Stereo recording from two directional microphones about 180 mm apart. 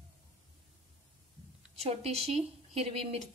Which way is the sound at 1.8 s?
35° right (ahead or behind).